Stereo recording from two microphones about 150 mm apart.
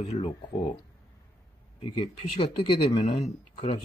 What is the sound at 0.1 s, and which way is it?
Speech, 45° left (ahead or behind).